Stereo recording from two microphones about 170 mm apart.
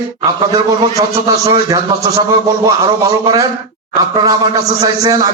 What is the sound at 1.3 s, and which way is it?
A man's voice, 20° right (ahead or behind).